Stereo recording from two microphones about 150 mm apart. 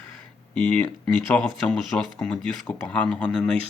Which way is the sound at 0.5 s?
5° left (ahead or behind).